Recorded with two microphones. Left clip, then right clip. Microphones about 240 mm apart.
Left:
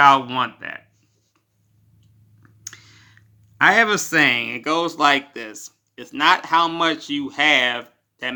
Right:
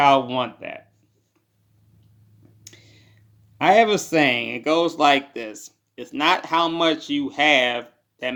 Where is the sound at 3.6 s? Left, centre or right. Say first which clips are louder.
Left 1 dB; centre.